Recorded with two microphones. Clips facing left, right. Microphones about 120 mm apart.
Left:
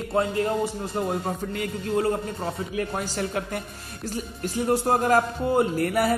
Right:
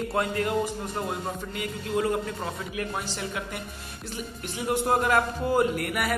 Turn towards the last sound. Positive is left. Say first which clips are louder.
# left 4 dB
turn(degrees=30)  # may be behind; listen again after turning